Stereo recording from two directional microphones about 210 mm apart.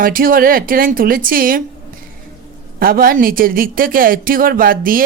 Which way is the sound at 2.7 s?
45° right (ahead or behind).